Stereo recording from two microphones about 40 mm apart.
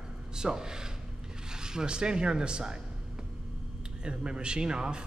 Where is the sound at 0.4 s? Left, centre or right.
Centre.